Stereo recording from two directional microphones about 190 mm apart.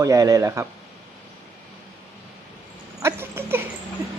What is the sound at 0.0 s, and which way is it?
Speech, 15° right (ahead or behind).